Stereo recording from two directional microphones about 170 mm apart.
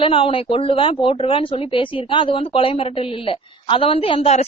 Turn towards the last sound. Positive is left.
turn(degrees=35)  # may be behind; listen again after turning